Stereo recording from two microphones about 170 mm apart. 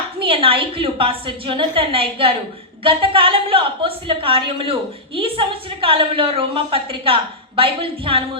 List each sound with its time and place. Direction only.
0.2 s a woman's voice: 35° right (ahead or behind)